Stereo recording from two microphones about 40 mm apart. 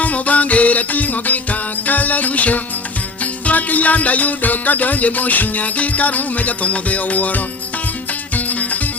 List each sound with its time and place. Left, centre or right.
0.0 s music: left